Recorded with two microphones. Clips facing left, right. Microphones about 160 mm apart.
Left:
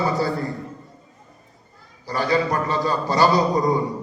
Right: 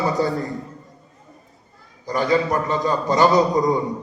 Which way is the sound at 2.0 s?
20° right (ahead or behind).